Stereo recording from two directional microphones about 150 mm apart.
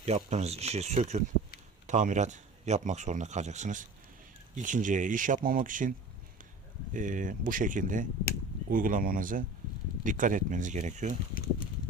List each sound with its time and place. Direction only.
0.0 s speech: 45° right (ahead or behind); by 5.9 s 60° right (ahead or behind)
6.9 s speech: 60° right (ahead or behind)